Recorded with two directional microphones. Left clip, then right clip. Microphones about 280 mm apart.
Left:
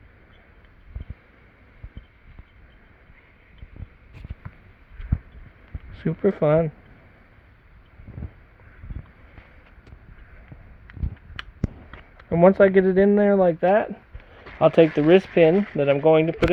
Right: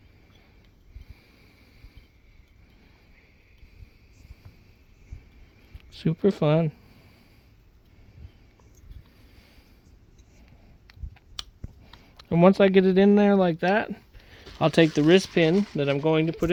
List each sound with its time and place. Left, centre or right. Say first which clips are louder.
5.9 s speech: left 2 dB; right
12.1 s speech: left 3 dB; right
14.8 s speech: left 3 dB; right